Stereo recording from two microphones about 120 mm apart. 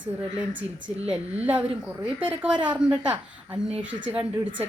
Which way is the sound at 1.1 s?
10° right (ahead or behind).